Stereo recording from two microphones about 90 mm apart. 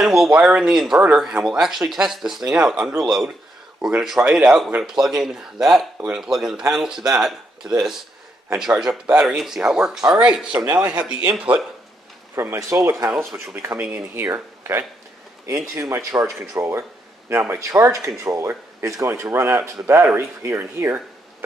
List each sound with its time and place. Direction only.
0.0 s speech: 5° right (ahead or behind)
12.4 s speech: 30° right (ahead or behind)
13.5 s speech: 25° right (ahead or behind)